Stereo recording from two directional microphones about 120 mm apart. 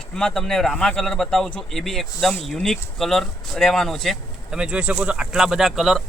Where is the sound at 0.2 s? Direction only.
5° left (ahead or behind).